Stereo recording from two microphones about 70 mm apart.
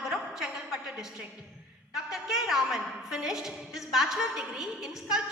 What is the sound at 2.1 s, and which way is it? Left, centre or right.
A woman's voice, centre.